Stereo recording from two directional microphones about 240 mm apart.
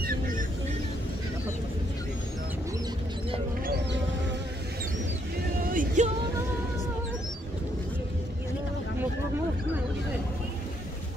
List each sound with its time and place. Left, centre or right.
0.0 s squawk: right
5.7 s vehicle: right